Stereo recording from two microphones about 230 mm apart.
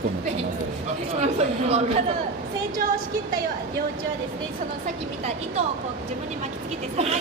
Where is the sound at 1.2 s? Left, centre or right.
Right.